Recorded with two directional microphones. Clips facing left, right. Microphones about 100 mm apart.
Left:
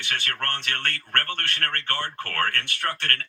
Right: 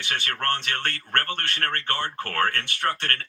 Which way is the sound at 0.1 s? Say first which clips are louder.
Right 3 dB; 20° right (ahead or behind).